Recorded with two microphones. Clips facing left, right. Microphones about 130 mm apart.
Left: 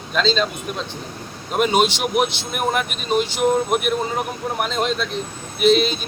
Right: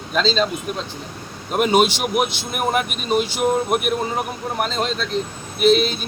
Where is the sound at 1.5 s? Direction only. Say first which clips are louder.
Right 1 dB; 5° right (ahead or behind).